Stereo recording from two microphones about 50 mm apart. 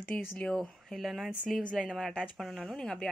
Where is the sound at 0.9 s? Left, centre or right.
Centre.